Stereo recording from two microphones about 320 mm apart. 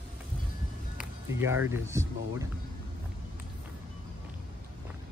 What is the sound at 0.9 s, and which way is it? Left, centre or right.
Speech, centre.